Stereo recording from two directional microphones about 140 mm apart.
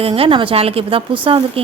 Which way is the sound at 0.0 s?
45° right (ahead or behind).